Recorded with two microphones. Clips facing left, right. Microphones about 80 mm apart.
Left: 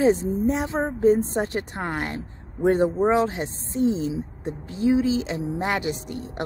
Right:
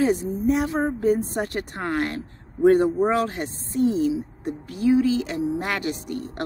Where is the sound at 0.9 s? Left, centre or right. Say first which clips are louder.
Left 3 dB; left.